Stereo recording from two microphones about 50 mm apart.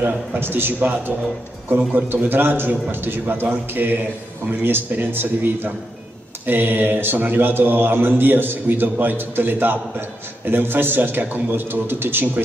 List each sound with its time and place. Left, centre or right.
0.0 s a man's voice: right